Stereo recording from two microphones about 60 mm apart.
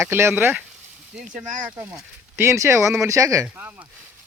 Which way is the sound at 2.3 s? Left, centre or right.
Right.